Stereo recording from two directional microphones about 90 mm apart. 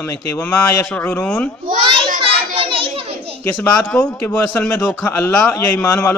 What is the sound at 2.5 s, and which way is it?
Children playing, 85° right.